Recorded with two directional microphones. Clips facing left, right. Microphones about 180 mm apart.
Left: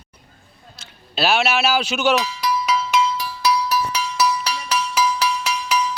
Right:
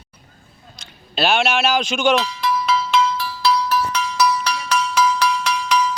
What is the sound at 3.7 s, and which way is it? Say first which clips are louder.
Music: right 1 dB; 10° left (ahead or behind).